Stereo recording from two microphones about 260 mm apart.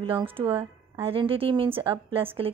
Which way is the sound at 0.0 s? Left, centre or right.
Centre.